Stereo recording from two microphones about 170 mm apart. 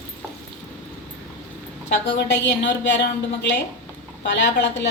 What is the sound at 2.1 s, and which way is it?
A woman's voice, 85° left.